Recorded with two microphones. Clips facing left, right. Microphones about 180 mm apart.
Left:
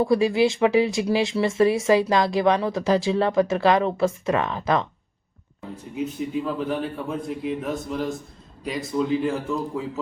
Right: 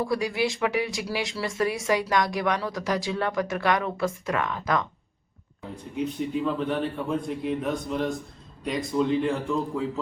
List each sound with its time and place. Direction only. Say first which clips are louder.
0.0 s speech: left 7 dB; 25° left (ahead or behind)
6.0 s a man's voice: even; centre (ahead or behind)